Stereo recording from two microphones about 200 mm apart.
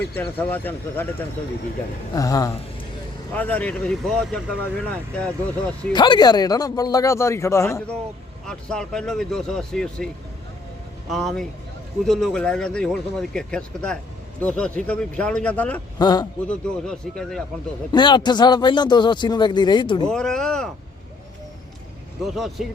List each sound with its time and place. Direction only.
0.0 s speech: 10° left (ahead or behind)
5.9 s speech: 20° left (ahead or behind); by 10.1 s 5° left (ahead or behind)
11.1 s speech: centre (ahead or behind)
16.0 s speech: 20° left (ahead or behind)
16.5 s speech: 5° left (ahead or behind)
17.9 s speech: 20° left (ahead or behind)
20.1 s speech: 5° left (ahead or behind)
22.2 s speech: centre (ahead or behind)